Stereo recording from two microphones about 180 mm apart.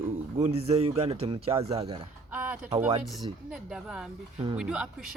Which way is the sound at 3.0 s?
Centre (ahead or behind).